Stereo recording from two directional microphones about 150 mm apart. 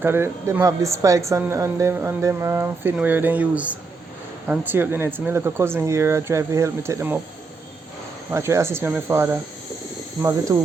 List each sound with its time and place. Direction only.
0.0 s a woman's voice: 15° right (ahead or behind)
8.3 s a woman's voice: 20° right (ahead or behind)
10.5 s speech: 20° right (ahead or behind)